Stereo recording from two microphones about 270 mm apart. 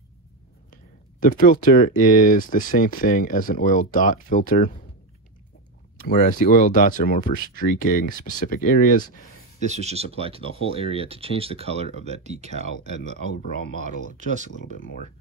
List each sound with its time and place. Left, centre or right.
1.2 s speech: left
6.0 s speech: left
9.6 s speech: right
13.8 s speech: right
14.7 s speech: left